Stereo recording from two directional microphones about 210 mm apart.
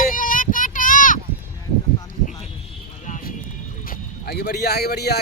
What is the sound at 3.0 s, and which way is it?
Clip-clop, 35° left (ahead or behind).